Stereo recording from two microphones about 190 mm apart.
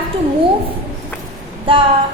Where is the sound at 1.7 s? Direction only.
25° right (ahead or behind).